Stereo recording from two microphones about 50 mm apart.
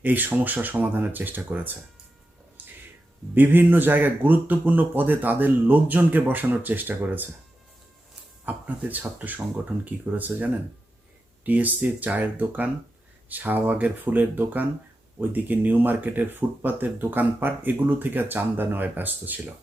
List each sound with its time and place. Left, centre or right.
0.0 s speech: right
2.6 s a sound: right
3.3 s speech: right
8.4 s speech: right